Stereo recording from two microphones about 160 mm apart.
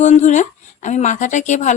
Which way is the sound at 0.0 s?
50° left (ahead or behind).